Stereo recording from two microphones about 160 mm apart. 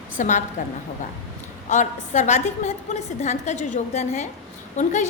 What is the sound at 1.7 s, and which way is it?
A woman's voice, 50° left (ahead or behind).